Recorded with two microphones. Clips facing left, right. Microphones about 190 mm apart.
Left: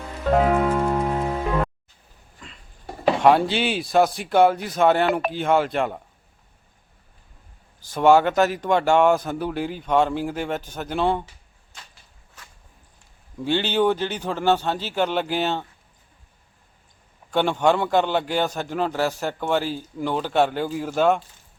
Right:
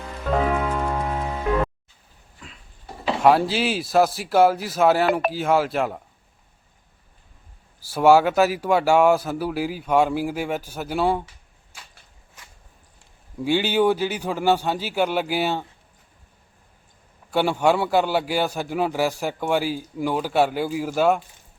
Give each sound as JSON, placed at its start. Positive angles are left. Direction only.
{"t": 0.3, "sound": "music", "side_deg": 0}
{"t": 2.4, "sound": "a sound", "side_deg": 0}
{"t": 3.2, "sound": "speech", "side_deg": 0}
{"t": 7.8, "sound": "a man's voice", "side_deg": -10}
{"t": 11.7, "sound": "a sound", "side_deg": -10}
{"t": 13.4, "sound": "a man's voice", "side_deg": -10}
{"t": 17.3, "sound": "a man's voice", "side_deg": -10}